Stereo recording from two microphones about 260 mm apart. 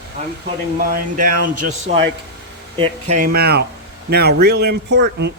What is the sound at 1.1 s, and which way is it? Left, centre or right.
Speech, right.